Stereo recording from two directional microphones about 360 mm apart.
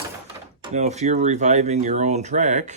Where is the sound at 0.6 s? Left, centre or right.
Centre.